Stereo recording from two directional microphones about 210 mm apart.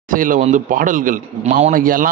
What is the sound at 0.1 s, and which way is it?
A man's voice, 40° right (ahead or behind).